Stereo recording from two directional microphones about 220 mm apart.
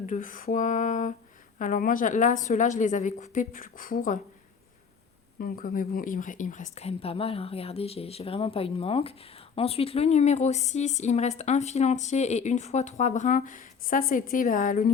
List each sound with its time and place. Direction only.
0.0 s speech: 35° left (ahead or behind)
5.4 s speech: 40° left (ahead or behind)